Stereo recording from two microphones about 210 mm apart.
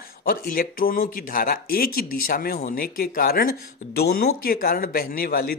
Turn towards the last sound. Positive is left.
turn(degrees=45)  # may be behind; listen again after turning